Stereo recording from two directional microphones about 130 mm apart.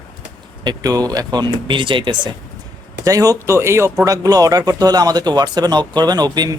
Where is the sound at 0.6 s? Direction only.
30° right (ahead or behind).